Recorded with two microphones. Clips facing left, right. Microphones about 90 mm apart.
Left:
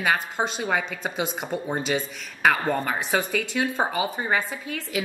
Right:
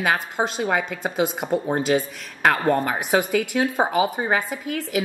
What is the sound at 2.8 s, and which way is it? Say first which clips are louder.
Speech: right 4 dB; 15° right (ahead or behind).